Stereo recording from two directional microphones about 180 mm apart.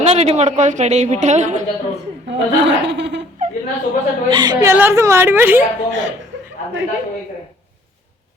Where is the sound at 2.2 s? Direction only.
85° right.